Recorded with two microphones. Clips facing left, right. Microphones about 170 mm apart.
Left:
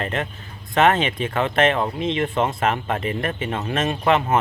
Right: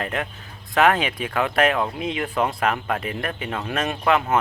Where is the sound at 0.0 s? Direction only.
Centre (ahead or behind).